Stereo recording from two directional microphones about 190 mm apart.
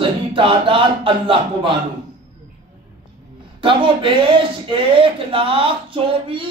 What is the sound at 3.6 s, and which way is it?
Speech, 25° right (ahead or behind).